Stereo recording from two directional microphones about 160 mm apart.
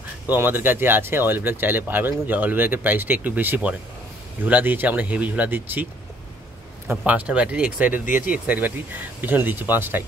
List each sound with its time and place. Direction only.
0.3 s speech: 15° right (ahead or behind)
6.9 s speech: 10° right (ahead or behind)
8.0 s speech: 55° left (ahead or behind)
8.5 s speech: 10° right (ahead or behind)